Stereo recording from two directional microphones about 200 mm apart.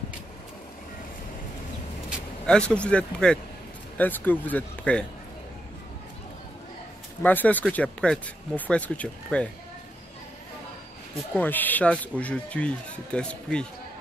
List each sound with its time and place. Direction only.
2.0 s speech: 5° left (ahead or behind)
7.2 s speech: 10° left (ahead or behind)
11.3 s speech: 10° left (ahead or behind)